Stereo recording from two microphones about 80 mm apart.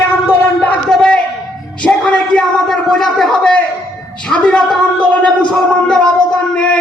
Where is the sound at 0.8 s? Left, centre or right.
Centre.